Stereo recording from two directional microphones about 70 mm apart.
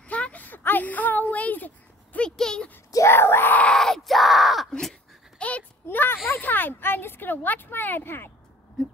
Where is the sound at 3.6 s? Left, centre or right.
Centre.